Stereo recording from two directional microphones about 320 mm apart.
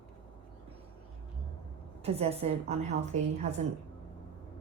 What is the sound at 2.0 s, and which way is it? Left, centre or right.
A woman's voice, centre.